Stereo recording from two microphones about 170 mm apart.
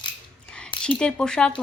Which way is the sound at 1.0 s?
5° left (ahead or behind).